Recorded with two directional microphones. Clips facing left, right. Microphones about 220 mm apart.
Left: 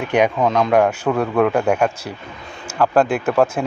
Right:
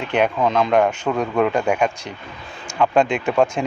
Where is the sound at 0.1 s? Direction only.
10° left (ahead or behind).